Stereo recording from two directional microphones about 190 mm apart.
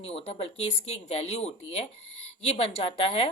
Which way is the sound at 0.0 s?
30° left (ahead or behind).